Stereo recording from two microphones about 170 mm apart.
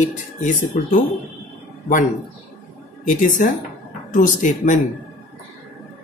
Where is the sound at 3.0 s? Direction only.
50° left (ahead or behind).